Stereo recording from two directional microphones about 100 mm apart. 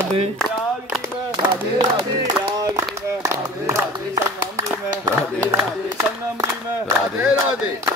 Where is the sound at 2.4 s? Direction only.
30° right (ahead or behind).